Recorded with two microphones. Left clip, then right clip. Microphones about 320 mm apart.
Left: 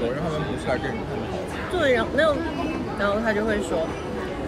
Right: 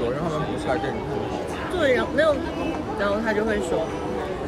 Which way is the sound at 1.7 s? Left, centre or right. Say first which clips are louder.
Even; centre.